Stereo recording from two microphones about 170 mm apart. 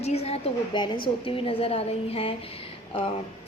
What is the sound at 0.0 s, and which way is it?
A woman's voice, 35° left (ahead or behind).